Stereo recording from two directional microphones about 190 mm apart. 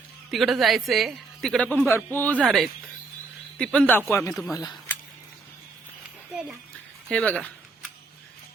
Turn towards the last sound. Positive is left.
turn(degrees=5)  # may be behind; listen again after turning